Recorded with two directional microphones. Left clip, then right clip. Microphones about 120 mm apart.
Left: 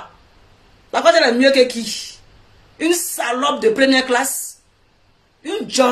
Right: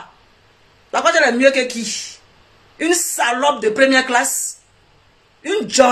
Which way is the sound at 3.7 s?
20° left (ahead or behind).